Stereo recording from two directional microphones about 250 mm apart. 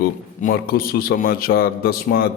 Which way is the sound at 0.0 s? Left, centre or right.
Left.